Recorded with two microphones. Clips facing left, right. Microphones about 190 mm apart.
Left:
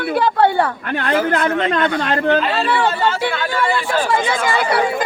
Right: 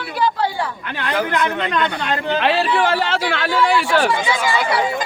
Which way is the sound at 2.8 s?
80° right.